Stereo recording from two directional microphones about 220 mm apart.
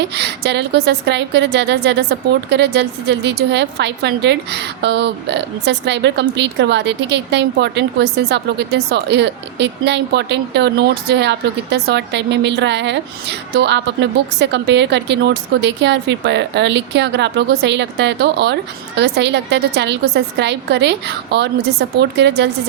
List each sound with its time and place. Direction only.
0.1 s a woman's voice: 50° right (ahead or behind)